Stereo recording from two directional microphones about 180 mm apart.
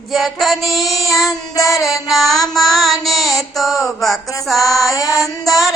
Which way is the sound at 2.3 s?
Centre (ahead or behind).